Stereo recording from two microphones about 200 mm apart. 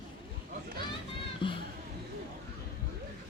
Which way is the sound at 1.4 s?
25° left (ahead or behind).